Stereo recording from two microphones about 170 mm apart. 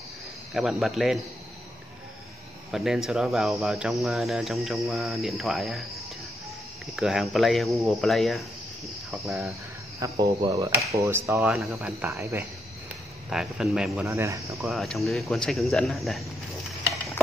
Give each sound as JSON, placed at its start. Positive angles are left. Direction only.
{"t": 0.5, "sound": "speech", "side_deg": 0}
{"t": 2.7, "sound": "speech", "side_deg": 0}
{"t": 7.0, "sound": "speech", "side_deg": 0}
{"t": 9.9, "sound": "speech", "side_deg": -20}
{"t": 11.4, "sound": "speech", "side_deg": 0}
{"t": 12.0, "sound": "speech", "side_deg": -15}
{"t": 13.3, "sound": "speech", "side_deg": -5}
{"t": 14.0, "sound": "speech", "side_deg": -15}
{"t": 14.6, "sound": "speech", "side_deg": 0}